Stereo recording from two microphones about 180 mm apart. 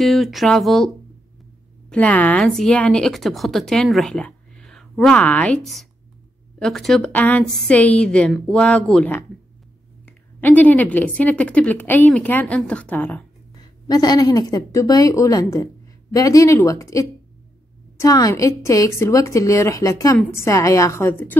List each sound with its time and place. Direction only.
0.0 s a woman's voice: centre (ahead or behind)
13.8 s a woman's voice: 20° left (ahead or behind)